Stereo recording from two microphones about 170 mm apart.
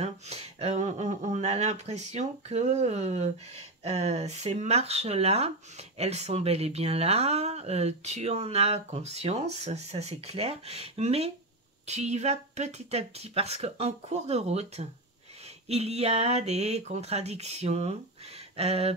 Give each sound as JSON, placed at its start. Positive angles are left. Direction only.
{"t": 0.0, "sound": "speech", "side_deg": -40}